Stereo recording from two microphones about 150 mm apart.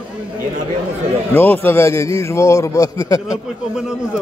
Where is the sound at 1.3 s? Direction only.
10° left (ahead or behind).